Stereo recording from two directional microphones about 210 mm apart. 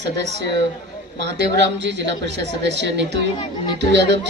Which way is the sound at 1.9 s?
55° right (ahead or behind).